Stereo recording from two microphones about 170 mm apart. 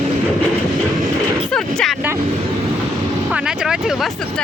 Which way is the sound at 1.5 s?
5° left (ahead or behind).